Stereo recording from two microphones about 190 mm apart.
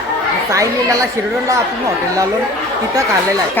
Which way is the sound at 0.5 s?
15° right (ahead or behind).